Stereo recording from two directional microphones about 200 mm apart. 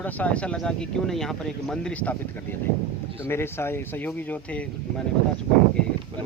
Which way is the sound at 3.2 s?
10° left (ahead or behind).